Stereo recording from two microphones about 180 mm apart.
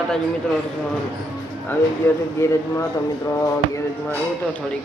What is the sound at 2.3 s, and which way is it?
Speech, 15° left (ahead or behind).